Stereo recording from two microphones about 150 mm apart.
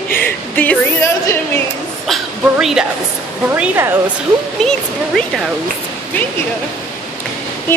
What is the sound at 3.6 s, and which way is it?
Speech, 15° right (ahead or behind).